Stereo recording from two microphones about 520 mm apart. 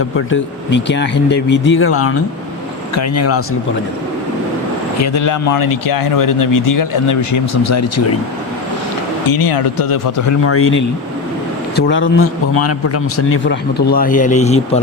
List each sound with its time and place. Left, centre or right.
0.3 s a man's voice: left
4.9 s speech: left
9.2 s speech: left
10.5 s a man's voice: left